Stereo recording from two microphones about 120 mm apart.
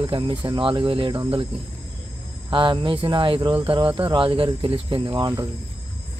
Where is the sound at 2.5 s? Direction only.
45° right (ahead or behind).